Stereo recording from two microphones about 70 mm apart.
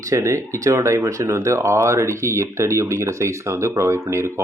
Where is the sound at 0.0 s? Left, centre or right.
Right.